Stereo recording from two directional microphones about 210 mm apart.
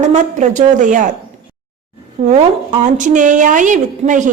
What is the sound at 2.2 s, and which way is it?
A woman's voice, 30° right (ahead or behind).